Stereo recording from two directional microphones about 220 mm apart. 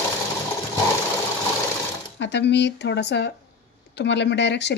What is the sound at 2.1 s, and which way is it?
Speech, 50° left (ahead or behind).